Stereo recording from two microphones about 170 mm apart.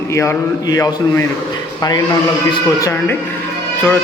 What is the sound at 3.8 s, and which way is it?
Music, 10° left (ahead or behind).